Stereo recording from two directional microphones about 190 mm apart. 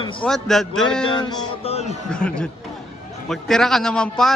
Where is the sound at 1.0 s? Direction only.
25° left (ahead or behind).